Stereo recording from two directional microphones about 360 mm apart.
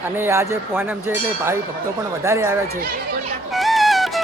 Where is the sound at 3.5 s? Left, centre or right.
Centre.